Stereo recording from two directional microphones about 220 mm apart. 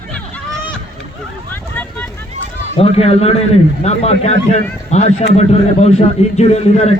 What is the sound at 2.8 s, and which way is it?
A man's voice, 25° left (ahead or behind).